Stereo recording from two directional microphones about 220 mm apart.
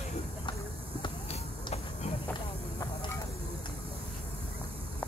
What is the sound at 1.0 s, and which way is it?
Basketball bounce, 30° left (ahead or behind).